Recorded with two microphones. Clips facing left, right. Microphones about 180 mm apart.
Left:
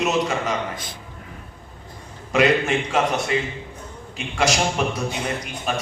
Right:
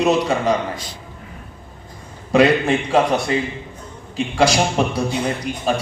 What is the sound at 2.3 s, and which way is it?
A man's voice, 35° right (ahead or behind).